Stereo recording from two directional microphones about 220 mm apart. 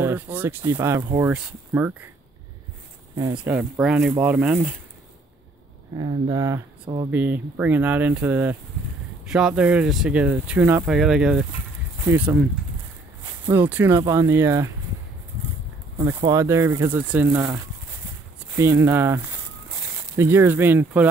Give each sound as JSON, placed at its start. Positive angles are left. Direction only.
{"t": 0.0, "sound": "speech", "side_deg": -10}
{"t": 3.3, "sound": "speech", "side_deg": -5}
{"t": 5.9, "sound": "speech", "side_deg": -20}
{"t": 13.5, "sound": "speech", "side_deg": -10}
{"t": 16.2, "sound": "speech", "side_deg": -15}
{"t": 18.6, "sound": "speech", "side_deg": -10}